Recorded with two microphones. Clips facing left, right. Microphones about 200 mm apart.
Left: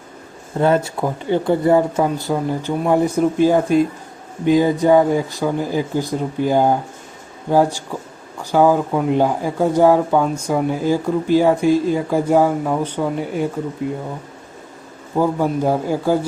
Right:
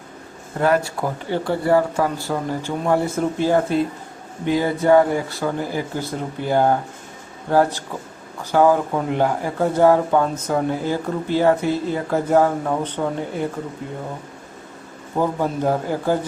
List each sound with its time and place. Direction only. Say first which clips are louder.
0.6 s speech: left 2 dB; 25° left (ahead or behind)
15.2 s speech: left 3 dB; 10° left (ahead or behind)